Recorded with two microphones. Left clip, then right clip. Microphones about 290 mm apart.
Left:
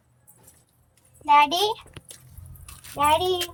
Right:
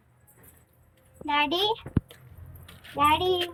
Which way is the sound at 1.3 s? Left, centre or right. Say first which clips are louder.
Left 7 dB; centre.